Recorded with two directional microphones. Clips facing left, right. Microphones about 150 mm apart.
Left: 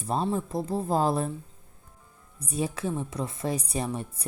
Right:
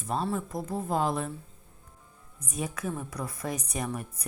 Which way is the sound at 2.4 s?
30° left (ahead or behind).